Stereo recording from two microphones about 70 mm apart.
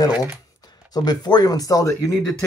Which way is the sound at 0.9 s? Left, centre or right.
Left.